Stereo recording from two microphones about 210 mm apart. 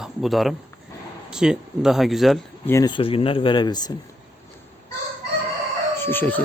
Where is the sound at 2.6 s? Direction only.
15° left (ahead or behind).